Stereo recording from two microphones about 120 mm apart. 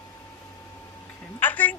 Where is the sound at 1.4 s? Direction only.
15° left (ahead or behind).